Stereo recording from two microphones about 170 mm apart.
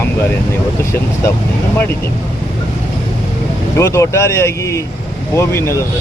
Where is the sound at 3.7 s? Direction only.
15° left (ahead or behind).